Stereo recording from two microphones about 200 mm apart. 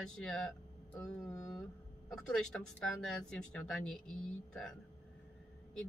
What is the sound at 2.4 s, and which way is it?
Speech, 5° left (ahead or behind).